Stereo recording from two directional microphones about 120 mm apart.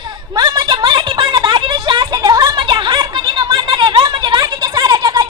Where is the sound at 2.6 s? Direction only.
40° right (ahead or behind).